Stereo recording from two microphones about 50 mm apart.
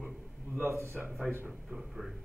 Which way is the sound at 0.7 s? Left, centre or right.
Right.